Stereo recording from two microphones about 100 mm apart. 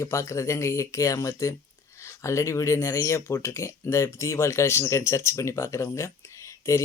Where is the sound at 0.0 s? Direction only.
30° left (ahead or behind).